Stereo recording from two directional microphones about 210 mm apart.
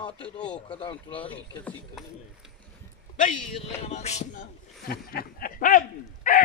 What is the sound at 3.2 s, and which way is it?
A man's voice, 40° left (ahead or behind).